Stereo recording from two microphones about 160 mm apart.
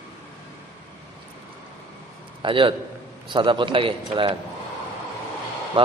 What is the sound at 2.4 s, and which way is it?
A man's voice, 30° right (ahead or behind).